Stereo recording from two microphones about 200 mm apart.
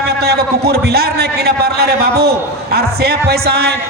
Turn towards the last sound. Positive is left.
turn(degrees=-55)  # may be behind; listen again after turning